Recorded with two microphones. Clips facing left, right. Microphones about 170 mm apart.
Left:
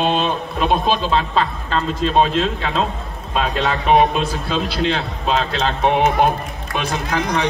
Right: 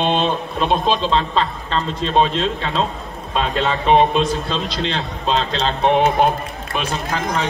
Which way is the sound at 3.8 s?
10° left (ahead or behind).